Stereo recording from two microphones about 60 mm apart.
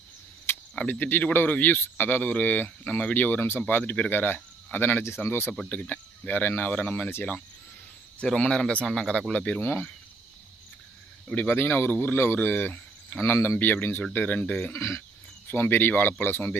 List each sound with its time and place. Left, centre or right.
0.5 s cricket: left
0.9 s speech: left
8.2 s speech: centre
9.6 s speech: left
11.3 s speech: left
14.8 s speech: left
15.4 s speech: left